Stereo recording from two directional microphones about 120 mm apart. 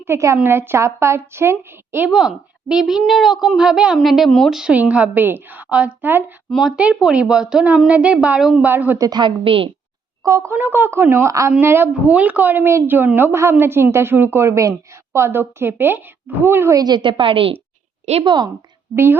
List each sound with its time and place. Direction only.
0.0 s a woman's voice: 20° right (ahead or behind)
2.1 s a child's voice: 5° right (ahead or behind)
6.5 s a child's voice: 5° right (ahead or behind)
9.0 s a woman's voice: 35° right (ahead or behind)
10.2 s a woman's voice: 25° right (ahead or behind)
16.8 s a woman's voice: 40° right (ahead or behind)
18.0 s a woman's voice: 60° right (ahead or behind)
18.3 s a woman's voice: 35° right (ahead or behind)